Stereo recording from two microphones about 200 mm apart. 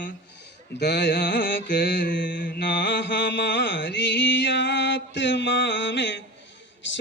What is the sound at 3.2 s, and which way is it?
Music, 60° left (ahead or behind).